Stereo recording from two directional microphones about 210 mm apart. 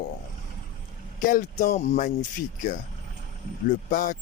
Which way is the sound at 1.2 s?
40° left (ahead or behind).